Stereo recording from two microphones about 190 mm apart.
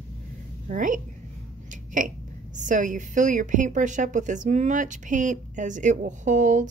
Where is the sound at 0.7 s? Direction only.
45° right (ahead or behind).